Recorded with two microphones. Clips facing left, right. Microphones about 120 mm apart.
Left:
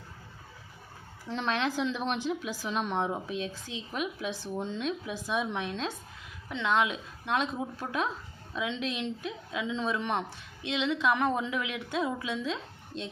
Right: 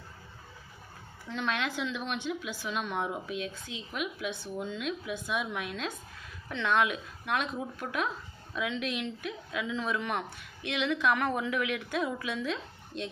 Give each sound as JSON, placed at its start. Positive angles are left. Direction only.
{"t": 1.3, "sound": "a woman's voice", "side_deg": 35}
{"t": 6.5, "sound": "speech", "side_deg": 20}